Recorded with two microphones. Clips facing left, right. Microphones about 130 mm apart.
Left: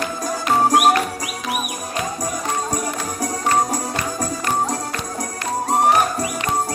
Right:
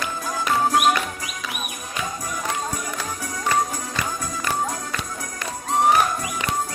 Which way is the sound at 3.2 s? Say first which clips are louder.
Left 4 dB; 35° left (ahead or behind).